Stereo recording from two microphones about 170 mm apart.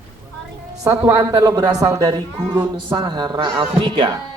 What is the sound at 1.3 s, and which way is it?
A woman's voice, 25° right (ahead or behind).